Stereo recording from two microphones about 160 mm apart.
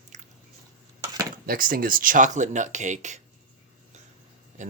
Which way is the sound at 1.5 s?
65° right (ahead or behind).